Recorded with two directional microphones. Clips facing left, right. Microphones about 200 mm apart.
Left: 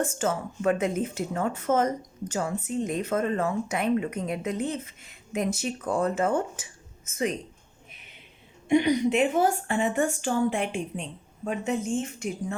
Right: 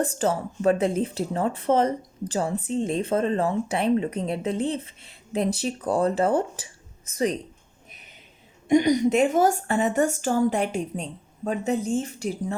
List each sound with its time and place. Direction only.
0.0 s speech: 35° right (ahead or behind)
8.7 s speech: 40° right (ahead or behind)